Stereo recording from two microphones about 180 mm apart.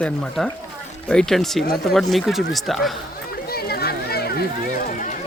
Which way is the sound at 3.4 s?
60° left (ahead or behind).